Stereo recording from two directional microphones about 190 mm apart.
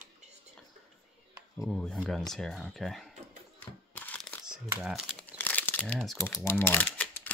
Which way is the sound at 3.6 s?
5° left (ahead or behind).